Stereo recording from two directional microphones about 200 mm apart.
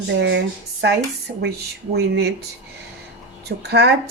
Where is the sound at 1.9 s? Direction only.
55° right (ahead or behind).